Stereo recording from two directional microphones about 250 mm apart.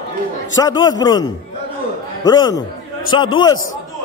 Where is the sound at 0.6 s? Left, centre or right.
Centre.